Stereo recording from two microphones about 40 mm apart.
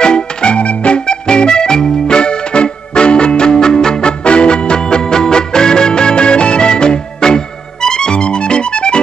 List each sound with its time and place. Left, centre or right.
0.0 s music: left